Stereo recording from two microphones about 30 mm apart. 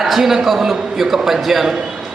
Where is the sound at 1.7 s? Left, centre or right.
Centre.